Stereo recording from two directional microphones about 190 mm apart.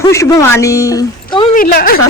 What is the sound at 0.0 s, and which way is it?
A woman's voice, 15° left (ahead or behind).